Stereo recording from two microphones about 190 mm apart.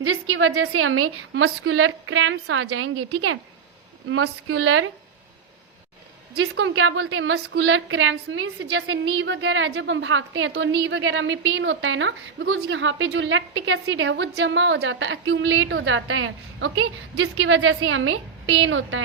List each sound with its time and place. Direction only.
0.0 s a woman's voice: 90° right
4.1 s a woman's voice: 90° right
6.4 s a woman's voice: 90° right